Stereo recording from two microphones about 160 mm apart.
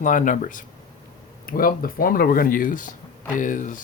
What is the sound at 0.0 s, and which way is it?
Speech, 55° left (ahead or behind).